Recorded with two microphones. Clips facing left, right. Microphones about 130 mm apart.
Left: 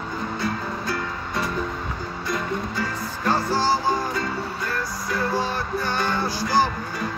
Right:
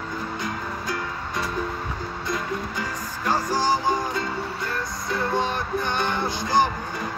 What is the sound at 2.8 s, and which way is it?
Music, 15° right (ahead or behind).